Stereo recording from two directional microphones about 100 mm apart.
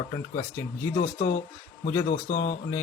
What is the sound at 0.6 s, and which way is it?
Speech, 30° left (ahead or behind).